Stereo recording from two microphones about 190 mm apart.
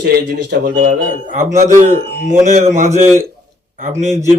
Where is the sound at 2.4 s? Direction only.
40° right (ahead or behind).